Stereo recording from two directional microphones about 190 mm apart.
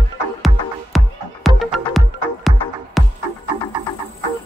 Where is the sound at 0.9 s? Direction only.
Centre (ahead or behind).